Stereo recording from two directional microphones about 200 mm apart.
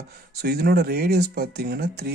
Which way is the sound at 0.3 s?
50° right (ahead or behind).